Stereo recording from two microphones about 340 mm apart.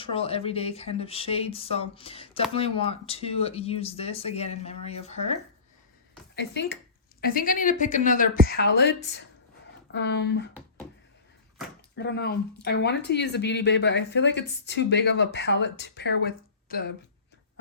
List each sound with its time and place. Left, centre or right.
0.0 s speech: centre
6.3 s a woman's voice: left
11.9 s speech: left